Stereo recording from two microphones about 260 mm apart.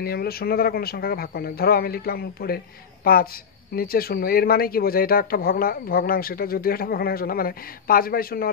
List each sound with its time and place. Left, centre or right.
0.0 s speech: left